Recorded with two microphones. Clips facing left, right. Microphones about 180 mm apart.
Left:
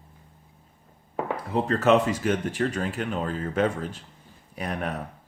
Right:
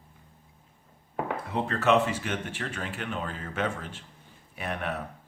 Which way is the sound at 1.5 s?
40° left (ahead or behind).